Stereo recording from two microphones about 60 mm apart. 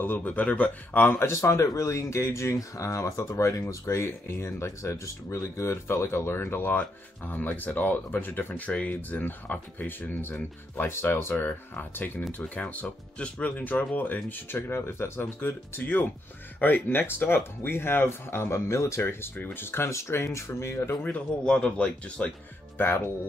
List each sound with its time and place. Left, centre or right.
0.0 s speech: left
0.9 s speech: left
1.3 s speech: left
8.6 s speech: left
11.4 s speech: left
12.8 s speech: centre; by 18.9 s left
18.9 s speech: left
21.0 s speech: left
22.8 s speech: left